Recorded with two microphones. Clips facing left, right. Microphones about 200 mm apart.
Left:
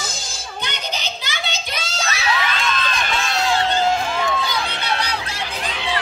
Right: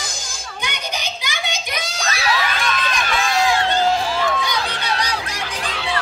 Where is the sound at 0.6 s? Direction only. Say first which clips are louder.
Right 1 dB; 10° right (ahead or behind).